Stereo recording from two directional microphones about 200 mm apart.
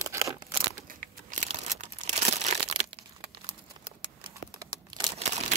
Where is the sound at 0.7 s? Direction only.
40° right (ahead or behind); by 3.3 s 25° right (ahead or behind).